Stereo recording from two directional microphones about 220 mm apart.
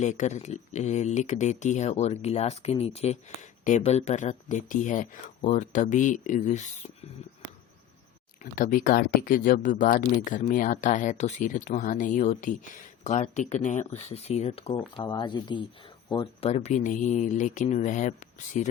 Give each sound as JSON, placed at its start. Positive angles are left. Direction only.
{"t": 0.0, "sound": "speech", "side_deg": 35}
{"t": 8.4, "sound": "speech", "side_deg": 35}